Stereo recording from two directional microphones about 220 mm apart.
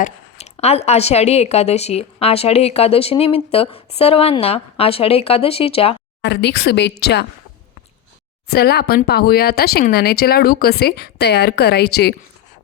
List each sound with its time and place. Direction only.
0.0 s a sound: 30° left (ahead or behind)
0.5 s a woman's voice: 30° left (ahead or behind)
6.2 s speech: 50° left (ahead or behind)
8.4 s speech: 45° left (ahead or behind)